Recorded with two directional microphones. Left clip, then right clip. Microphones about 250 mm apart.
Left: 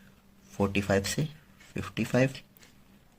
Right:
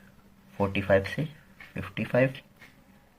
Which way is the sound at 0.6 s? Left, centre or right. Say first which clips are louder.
Right 3 dB; left.